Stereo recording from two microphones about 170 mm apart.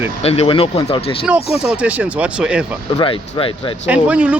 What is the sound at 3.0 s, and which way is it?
Speech, 30° left (ahead or behind).